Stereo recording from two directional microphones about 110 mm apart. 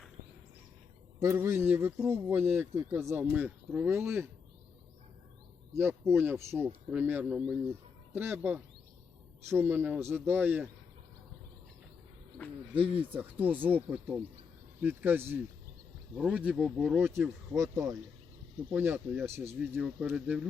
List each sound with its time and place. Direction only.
1.2 s speech: 25° right (ahead or behind)
5.7 s speech: 20° right (ahead or behind)
9.5 s speech: 20° right (ahead or behind)
12.7 s speech: 55° right (ahead or behind)
13.4 s speech: 15° right (ahead or behind); by 17.6 s centre (ahead or behind)
18.7 s speech: 15° right (ahead or behind)